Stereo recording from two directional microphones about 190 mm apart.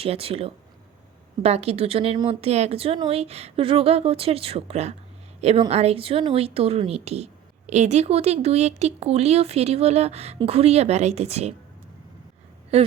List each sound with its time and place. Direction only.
0.0 s speech: 30° right (ahead or behind)
12.7 s speech: 30° right (ahead or behind)